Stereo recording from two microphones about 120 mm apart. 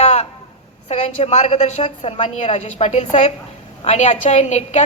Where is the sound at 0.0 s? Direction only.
60° left (ahead or behind).